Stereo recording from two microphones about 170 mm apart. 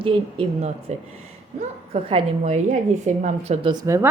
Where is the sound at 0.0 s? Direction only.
35° right (ahead or behind).